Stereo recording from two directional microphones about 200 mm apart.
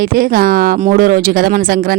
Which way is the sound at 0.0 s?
45° right (ahead or behind).